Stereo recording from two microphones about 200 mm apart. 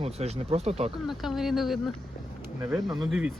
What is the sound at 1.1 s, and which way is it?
Speech, centre (ahead or behind).